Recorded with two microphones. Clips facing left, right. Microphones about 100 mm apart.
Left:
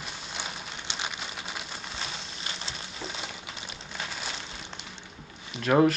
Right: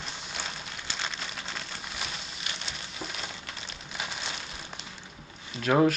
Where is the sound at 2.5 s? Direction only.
30° left (ahead or behind).